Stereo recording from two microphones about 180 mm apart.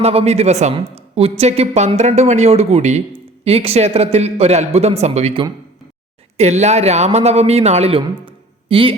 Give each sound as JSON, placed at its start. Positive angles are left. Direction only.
{"t": 0.0, "sound": "a woman's voice", "side_deg": -35}